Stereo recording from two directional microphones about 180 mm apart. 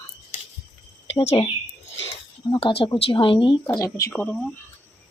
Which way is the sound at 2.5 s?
30° left (ahead or behind).